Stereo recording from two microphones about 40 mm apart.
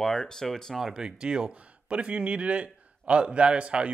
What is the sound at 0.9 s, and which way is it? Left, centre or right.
A man's voice, right.